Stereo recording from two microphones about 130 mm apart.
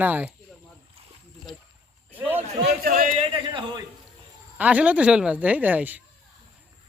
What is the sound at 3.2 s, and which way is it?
Speech, 40° right (ahead or behind).